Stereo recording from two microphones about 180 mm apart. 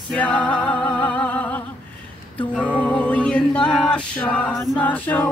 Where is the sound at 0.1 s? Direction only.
10° left (ahead or behind).